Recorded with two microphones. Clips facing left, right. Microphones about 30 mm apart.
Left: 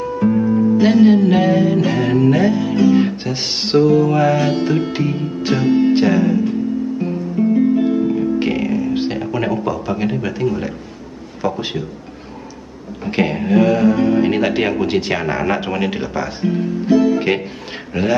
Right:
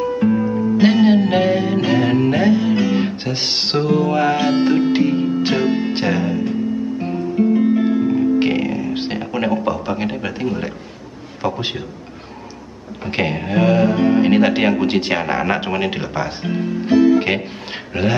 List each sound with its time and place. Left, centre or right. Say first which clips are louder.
0.3 s music: left 3 dB; centre
0.7 s music: left 1 dB; centre
3.0 s speech: left 3 dB; centre
7.0 s music: even; right
11.4 s speech: left 1 dB; right
13.0 s speech: left 2 dB; centre